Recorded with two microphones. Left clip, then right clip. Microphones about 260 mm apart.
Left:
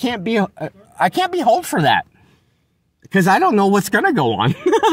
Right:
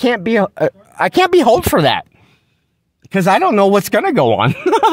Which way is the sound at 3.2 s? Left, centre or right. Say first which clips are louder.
Right 3 dB; right.